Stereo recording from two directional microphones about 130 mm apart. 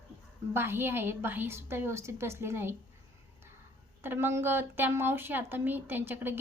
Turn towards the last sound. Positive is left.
turn(degrees=-15)  # may be behind; listen again after turning